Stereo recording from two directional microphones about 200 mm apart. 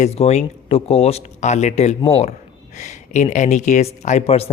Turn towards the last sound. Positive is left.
turn(degrees=35)  # may be behind; listen again after turning